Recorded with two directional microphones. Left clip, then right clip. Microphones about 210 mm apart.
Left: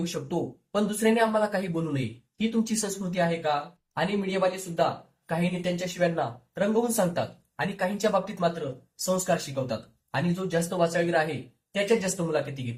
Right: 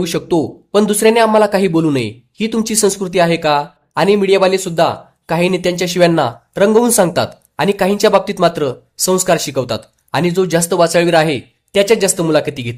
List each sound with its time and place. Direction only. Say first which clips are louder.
0.0 s speech: right 15 dB; 50° right (ahead or behind)